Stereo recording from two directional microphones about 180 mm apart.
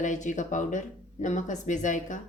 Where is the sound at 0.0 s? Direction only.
45° left (ahead or behind).